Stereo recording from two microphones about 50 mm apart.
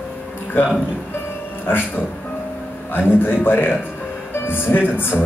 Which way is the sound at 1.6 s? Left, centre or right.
Left.